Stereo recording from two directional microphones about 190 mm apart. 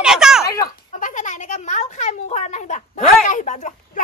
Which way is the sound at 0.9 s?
40° left (ahead or behind).